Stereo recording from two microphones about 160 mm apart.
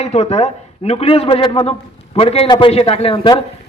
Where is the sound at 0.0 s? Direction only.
40° left (ahead or behind).